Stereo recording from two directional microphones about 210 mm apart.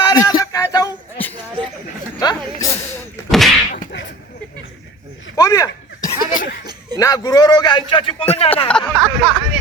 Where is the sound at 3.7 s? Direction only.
40° left (ahead or behind).